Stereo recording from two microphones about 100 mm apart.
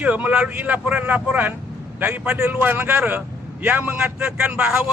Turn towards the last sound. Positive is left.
turn(degrees=-10)  # may be behind; listen again after turning